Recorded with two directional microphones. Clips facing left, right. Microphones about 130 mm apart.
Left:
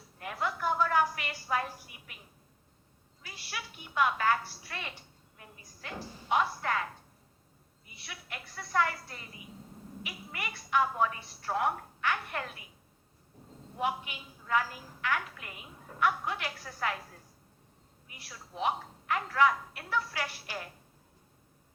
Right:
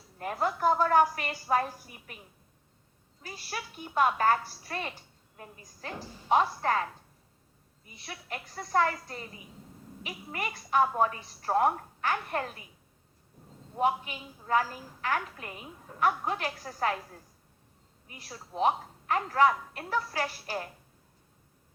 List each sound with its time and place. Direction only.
0.2 s a woman's voice: 40° right (ahead or behind)
3.2 s a woman's voice: 40° right (ahead or behind)
7.9 s a woman's voice: 35° right (ahead or behind)
13.7 s a woman's voice: 35° right (ahead or behind)
18.1 s a woman's voice: 35° right (ahead or behind)